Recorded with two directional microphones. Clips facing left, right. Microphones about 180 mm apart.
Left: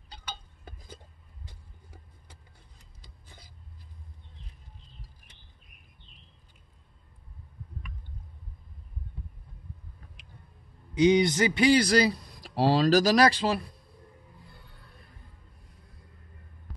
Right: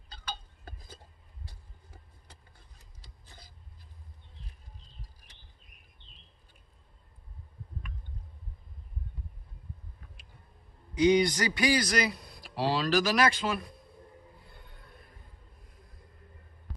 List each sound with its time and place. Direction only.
11.0 s speech: 20° left (ahead or behind)